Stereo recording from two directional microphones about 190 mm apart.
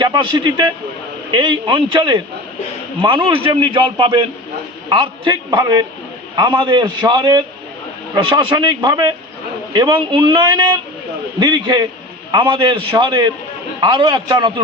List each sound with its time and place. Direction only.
0.0 s a man's voice: 25° right (ahead or behind)